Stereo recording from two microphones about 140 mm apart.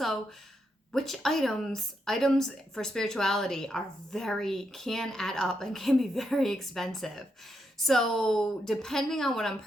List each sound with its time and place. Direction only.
0.9 s speech: centre (ahead or behind)